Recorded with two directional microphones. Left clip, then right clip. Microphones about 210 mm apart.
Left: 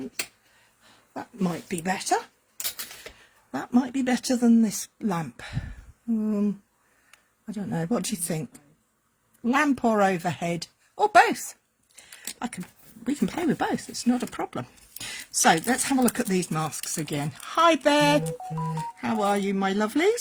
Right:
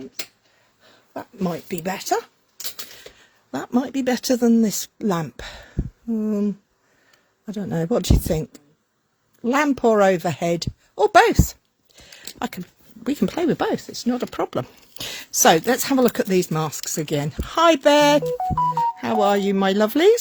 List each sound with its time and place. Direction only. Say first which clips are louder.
0.9 s speech: right 3 dB; 45° right (ahead or behind)
13.1 s speech: right 5 dB; 50° right (ahead or behind)